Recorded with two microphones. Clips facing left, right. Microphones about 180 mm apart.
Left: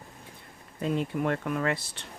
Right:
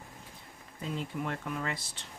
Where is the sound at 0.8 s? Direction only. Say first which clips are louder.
Left 8 dB; 60° left (ahead or behind).